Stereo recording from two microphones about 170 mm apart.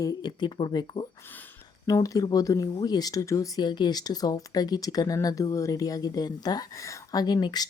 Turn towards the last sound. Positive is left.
turn(degrees=25)  # may be behind; listen again after turning